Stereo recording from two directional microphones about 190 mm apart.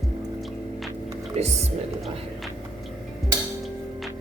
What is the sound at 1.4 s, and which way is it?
Speech, 35° right (ahead or behind).